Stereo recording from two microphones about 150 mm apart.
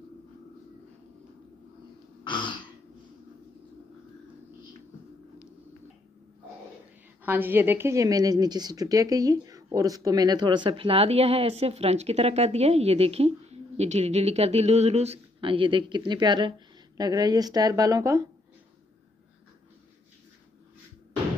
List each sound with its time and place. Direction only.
2.2 s throat clearing: 35° left (ahead or behind)
7.2 s a woman's voice: 15° right (ahead or behind)